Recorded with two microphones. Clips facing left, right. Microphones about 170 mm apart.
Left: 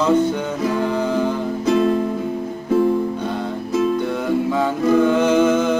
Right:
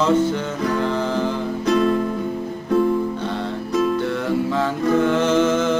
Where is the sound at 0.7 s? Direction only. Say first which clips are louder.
Left 2 dB; 10° left (ahead or behind).